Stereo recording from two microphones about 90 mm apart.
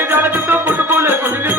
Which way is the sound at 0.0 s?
25° right (ahead or behind).